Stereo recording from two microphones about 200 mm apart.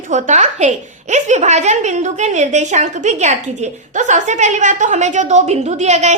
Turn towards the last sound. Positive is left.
turn(degrees=-35)  # may be behind; listen again after turning